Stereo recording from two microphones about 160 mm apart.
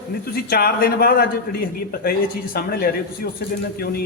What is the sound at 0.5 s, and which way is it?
Speech, 70° left (ahead or behind).